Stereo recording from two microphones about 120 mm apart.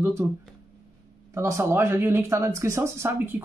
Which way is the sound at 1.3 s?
25° right (ahead or behind).